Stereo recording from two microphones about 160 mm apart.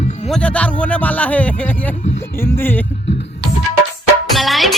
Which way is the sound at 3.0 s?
90° left.